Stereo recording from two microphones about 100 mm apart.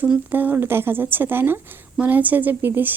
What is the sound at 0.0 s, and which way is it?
Speech, 20° right (ahead or behind).